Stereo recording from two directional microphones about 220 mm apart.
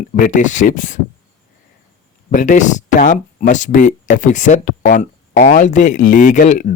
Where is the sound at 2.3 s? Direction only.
35° left (ahead or behind).